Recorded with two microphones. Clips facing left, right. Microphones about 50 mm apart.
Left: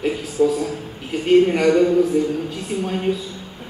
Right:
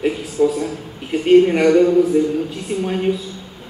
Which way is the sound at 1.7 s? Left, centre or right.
Centre.